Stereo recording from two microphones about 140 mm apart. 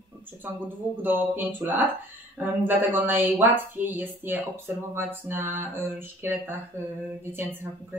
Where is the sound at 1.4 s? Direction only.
15° right (ahead or behind).